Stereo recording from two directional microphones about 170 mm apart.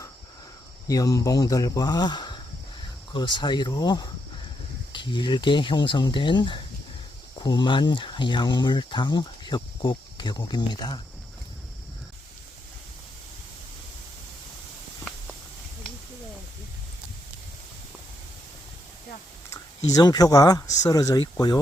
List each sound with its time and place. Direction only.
0.9 s speech: 20° left (ahead or behind)
19.9 s speech: 20° left (ahead or behind)